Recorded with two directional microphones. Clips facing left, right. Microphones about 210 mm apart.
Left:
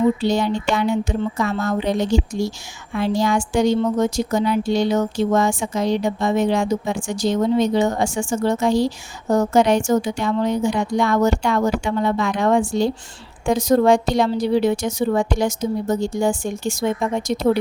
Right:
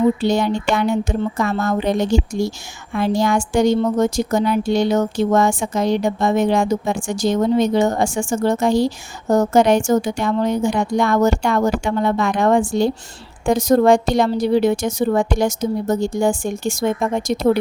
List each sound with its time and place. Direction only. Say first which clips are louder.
0.2 s speech: right 2 dB; 50° right (ahead or behind)